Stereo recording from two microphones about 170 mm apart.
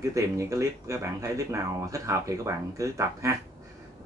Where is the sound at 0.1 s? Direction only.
15° right (ahead or behind).